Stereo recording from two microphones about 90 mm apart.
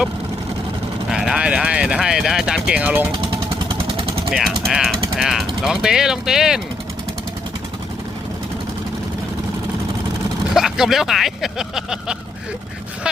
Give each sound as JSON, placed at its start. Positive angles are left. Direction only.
{"t": 1.1, "sound": "speech", "side_deg": -5}
{"t": 3.1, "sound": "vehicle", "side_deg": -65}
{"t": 4.3, "sound": "speech", "side_deg": 0}
{"t": 4.6, "sound": "mechanisms", "side_deg": 0}
{"t": 5.6, "sound": "speech", "side_deg": -5}
{"t": 10.5, "sound": "speech", "side_deg": -5}